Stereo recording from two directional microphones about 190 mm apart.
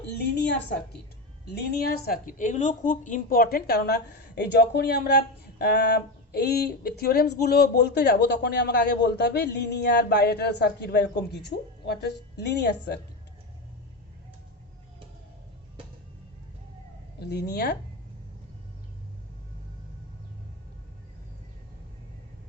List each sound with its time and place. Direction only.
0.3 s a woman's voice: 60° left (ahead or behind)
17.5 s a woman's voice: 60° left (ahead or behind)